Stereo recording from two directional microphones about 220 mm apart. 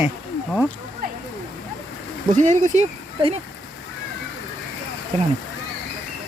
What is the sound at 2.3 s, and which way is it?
Speech, 35° right (ahead or behind).